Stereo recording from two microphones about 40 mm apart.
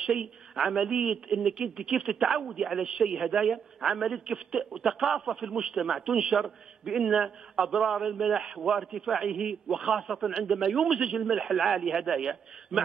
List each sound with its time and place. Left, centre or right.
0.0 s speech: centre
8.4 s speech: centre
8.7 s a man's voice: centre
9.2 s a man's voice: centre